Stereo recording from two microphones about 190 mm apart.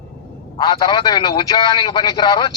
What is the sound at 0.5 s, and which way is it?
A man's voice, 20° left (ahead or behind).